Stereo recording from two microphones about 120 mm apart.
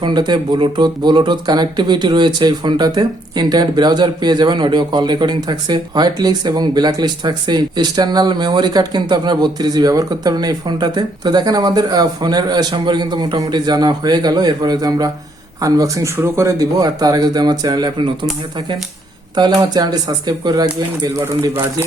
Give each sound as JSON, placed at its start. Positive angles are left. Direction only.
{"t": 0.0, "sound": "speech", "side_deg": -40}
{"t": 19.4, "sound": "speech", "side_deg": -35}